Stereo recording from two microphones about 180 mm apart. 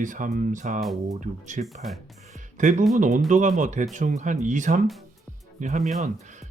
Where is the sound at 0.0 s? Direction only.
45° right (ahead or behind).